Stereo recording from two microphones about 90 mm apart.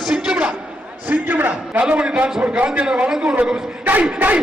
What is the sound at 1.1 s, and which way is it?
A man's voice, 20° right (ahead or behind).